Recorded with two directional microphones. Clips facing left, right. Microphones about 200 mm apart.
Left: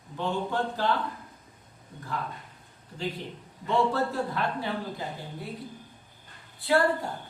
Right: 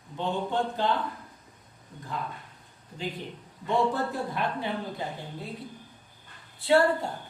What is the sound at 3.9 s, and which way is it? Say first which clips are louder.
Speech: left 2 dB; 20° right (ahead or behind).